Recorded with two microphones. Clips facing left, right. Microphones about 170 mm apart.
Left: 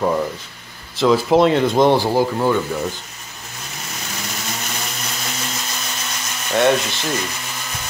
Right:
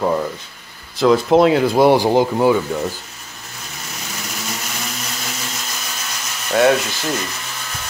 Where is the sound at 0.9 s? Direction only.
Centre (ahead or behind); by 2.5 s 20° right (ahead or behind).